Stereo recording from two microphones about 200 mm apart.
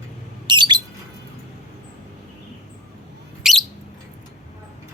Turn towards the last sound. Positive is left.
turn(degrees=0)  # may be behind; listen again after turning